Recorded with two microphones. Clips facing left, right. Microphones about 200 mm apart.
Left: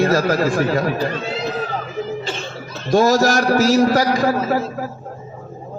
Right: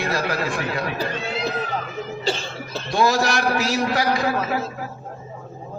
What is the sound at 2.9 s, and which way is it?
A man's voice, 45° left (ahead or behind).